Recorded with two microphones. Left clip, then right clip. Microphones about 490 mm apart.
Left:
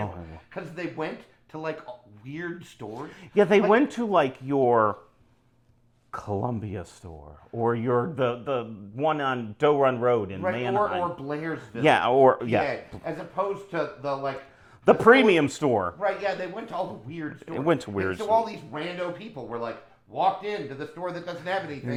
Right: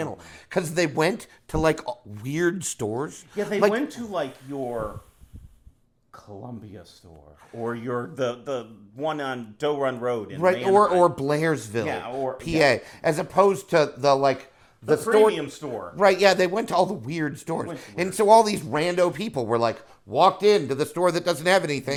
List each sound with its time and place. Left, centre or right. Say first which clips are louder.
0.5 s speech: right 11 dB; right
1.5 s a man's voice: right 10 dB; right
3.7 s speech: left 5 dB; left
6.1 s speech: left 11 dB; left
7.6 s a man's voice: left 5 dB; centre
10.4 s a man's voice: right 7 dB; right
11.9 s speech: left 15 dB; left
12.6 s speech: right 10 dB; right
15.0 s speech: left 1 dB; left
16.0 s a man's voice: right 9 dB; right
17.9 s a man's voice: right 7 dB; right